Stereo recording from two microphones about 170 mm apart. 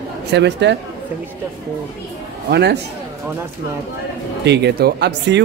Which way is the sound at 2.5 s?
80° right.